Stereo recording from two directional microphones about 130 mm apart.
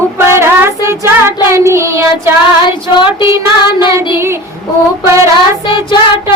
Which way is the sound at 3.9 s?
20° right (ahead or behind).